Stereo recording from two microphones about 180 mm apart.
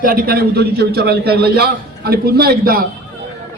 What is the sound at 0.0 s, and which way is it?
A man's voice, 55° right (ahead or behind).